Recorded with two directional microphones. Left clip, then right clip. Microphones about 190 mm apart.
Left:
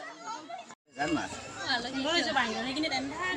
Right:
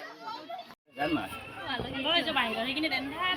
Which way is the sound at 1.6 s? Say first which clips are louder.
Left 4 dB; 20° right (ahead or behind).